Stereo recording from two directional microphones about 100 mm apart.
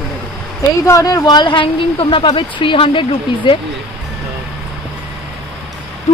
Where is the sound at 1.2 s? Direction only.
50° left (ahead or behind).